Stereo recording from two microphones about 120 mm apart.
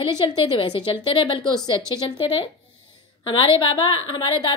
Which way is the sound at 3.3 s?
45° left (ahead or behind).